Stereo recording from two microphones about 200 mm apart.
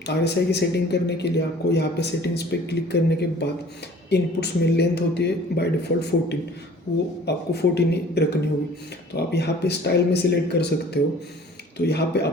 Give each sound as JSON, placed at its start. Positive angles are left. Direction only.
{"t": 0.0, "sound": "speech", "side_deg": 55}